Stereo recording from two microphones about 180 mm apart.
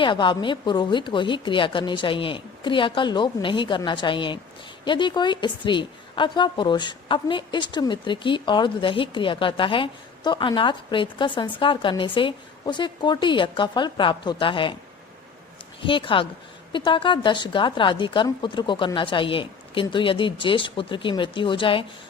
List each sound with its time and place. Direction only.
0.0 s a woman's voice: 25° left (ahead or behind)
15.8 s a woman's voice: 30° left (ahead or behind)